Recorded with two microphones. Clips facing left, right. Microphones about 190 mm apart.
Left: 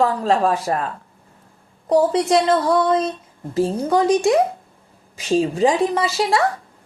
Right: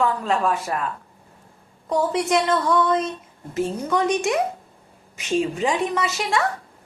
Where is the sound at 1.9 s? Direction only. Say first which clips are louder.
Left 5 dB; 35° left (ahead or behind).